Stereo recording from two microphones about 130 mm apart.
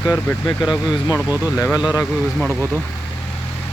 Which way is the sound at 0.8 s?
10° right (ahead or behind).